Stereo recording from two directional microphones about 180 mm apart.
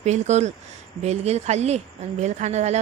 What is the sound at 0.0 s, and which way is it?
Speech, 40° right (ahead or behind).